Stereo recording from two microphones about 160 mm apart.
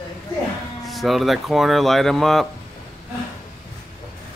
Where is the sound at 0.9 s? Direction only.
Centre (ahead or behind).